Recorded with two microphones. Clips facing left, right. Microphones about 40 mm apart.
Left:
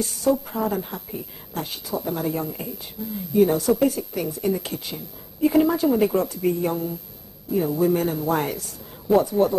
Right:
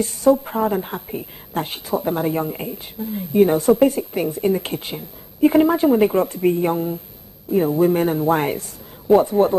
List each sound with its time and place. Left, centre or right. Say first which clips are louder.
0.0 s a woman's voice: right 6 dB; right